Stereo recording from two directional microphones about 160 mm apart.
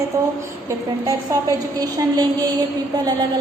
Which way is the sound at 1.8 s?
25° right (ahead or behind).